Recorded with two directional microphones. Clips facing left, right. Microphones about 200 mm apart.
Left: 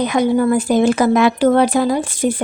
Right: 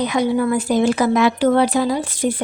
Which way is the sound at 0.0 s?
50° left (ahead or behind).